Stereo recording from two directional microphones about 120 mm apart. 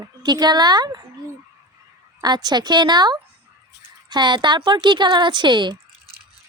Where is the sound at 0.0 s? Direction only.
35° right (ahead or behind).